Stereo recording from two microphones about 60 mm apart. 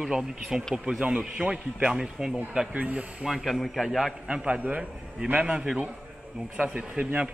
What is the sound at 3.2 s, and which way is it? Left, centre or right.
Speech, centre.